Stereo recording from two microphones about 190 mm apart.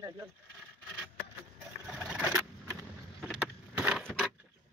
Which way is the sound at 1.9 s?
Centre (ahead or behind).